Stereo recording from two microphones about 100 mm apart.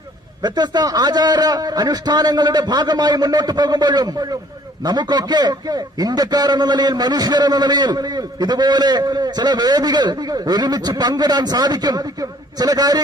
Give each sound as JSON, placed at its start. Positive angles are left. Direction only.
{"t": 0.4, "sound": "a man's voice", "side_deg": -45}